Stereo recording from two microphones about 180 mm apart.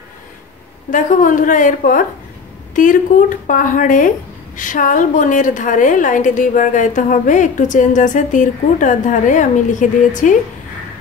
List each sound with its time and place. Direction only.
0.8 s a woman's voice: 45° left (ahead or behind)